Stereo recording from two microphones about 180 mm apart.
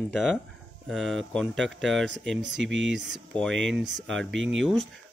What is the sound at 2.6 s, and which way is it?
Speech, 90° right.